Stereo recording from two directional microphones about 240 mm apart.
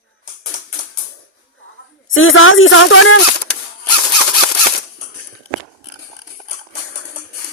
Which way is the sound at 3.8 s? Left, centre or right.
Left.